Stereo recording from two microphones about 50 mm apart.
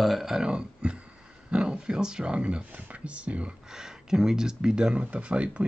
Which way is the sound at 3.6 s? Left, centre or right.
Centre.